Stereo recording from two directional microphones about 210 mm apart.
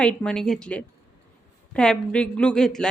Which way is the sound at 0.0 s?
5° left (ahead or behind).